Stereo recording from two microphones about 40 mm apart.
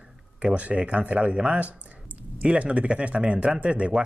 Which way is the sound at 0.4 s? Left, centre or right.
Right.